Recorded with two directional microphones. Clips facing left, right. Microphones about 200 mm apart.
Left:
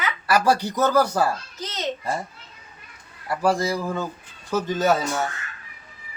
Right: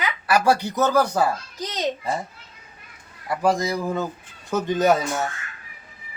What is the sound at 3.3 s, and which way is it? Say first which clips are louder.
A man's voice: even; 20° right (ahead or behind).